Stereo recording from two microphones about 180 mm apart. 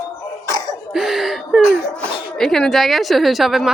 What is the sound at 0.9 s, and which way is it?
Speech, centre (ahead or behind).